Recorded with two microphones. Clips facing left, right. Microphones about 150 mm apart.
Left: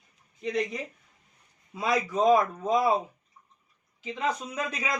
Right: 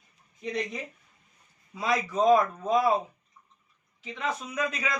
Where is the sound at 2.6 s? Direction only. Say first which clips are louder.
Even; 20° left (ahead or behind).